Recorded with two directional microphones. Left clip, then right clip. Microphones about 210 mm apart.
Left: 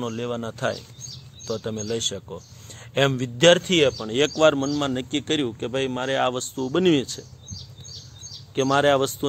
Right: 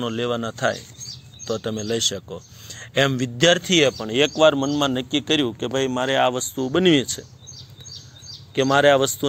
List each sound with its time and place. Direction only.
0.0 s speech: 15° right (ahead or behind)
0.4 s speech: 5° right (ahead or behind)
8.5 s speech: 10° right (ahead or behind)